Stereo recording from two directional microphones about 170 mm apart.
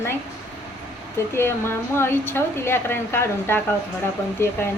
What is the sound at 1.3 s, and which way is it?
A woman's voice, 15° left (ahead or behind).